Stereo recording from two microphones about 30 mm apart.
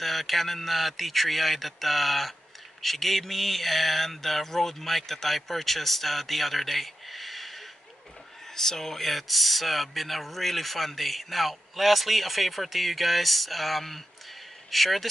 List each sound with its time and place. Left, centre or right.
0.0 s speech: centre
8.5 s speech: centre